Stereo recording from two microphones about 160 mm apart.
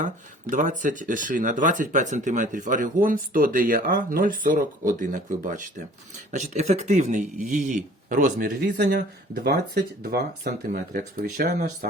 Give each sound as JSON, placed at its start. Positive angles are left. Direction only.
{"t": 0.5, "sound": "speech", "side_deg": -55}
{"t": 8.8, "sound": "speech", "side_deg": -90}